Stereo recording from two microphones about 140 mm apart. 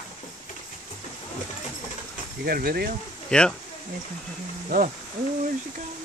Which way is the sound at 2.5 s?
90° right.